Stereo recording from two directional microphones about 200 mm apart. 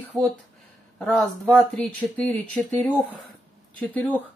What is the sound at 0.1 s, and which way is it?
Speech, 20° right (ahead or behind).